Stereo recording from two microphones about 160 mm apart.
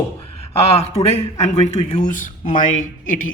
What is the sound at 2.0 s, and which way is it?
Speech, 55° left (ahead or behind).